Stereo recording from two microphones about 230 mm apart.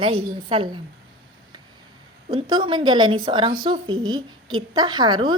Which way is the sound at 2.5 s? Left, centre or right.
Right.